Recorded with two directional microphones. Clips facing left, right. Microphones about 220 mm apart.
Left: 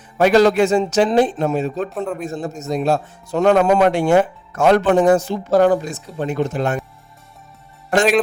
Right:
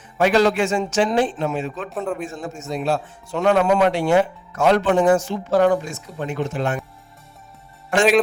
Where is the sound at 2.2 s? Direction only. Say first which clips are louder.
Left 5 dB; 40° left (ahead or behind).